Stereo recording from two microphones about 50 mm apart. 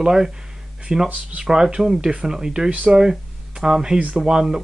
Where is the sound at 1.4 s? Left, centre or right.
Centre.